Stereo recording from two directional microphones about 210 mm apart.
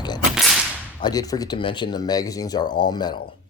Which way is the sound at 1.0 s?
20° left (ahead or behind).